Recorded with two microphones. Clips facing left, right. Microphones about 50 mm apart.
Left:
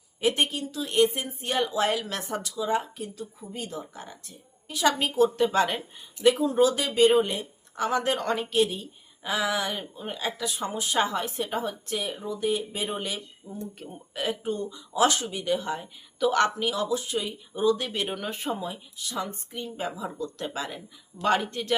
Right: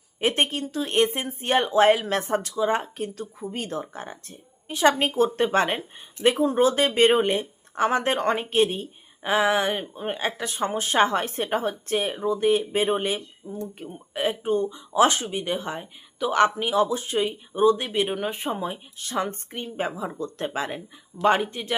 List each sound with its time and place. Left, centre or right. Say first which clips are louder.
0.2 s speech: right 2 dB; right; by 21.8 s centre